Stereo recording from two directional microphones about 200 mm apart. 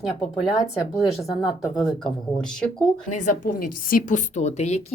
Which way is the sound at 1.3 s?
15° left (ahead or behind).